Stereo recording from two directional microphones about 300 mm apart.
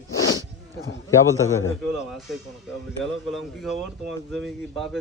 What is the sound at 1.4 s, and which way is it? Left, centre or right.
Speech, left.